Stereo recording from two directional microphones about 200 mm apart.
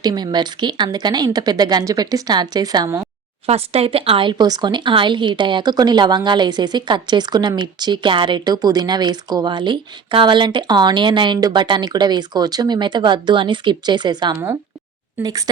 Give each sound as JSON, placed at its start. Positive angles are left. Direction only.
{"t": 0.0, "sound": "speech", "side_deg": -20}
{"t": 3.4, "sound": "speech", "side_deg": -30}